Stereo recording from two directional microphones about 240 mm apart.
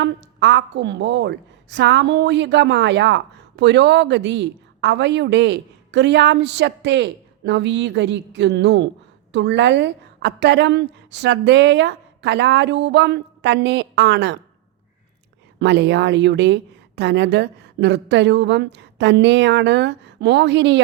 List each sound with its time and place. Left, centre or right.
0.0 s a woman's voice: right
15.5 s a woman's voice: right